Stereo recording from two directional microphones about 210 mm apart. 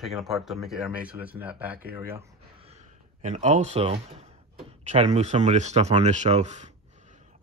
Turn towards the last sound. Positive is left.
turn(degrees=-35)  # may be behind; listen again after turning